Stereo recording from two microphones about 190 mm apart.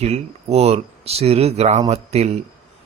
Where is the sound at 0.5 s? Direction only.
35° right (ahead or behind).